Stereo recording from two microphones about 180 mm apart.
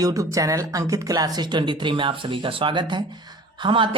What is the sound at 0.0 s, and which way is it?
Speech, 20° right (ahead or behind).